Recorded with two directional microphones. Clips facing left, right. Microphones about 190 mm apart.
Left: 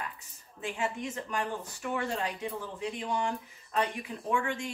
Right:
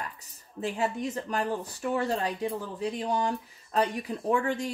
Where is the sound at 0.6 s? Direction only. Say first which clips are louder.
Right 4 dB; 35° right (ahead or behind).